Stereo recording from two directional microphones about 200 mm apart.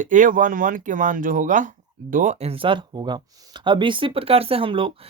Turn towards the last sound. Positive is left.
turn(degrees=-25)  # may be behind; listen again after turning